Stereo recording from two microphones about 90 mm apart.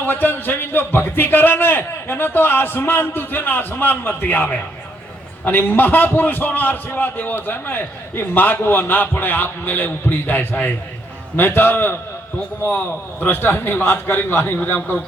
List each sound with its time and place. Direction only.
0.0 s speech: 20° left (ahead or behind)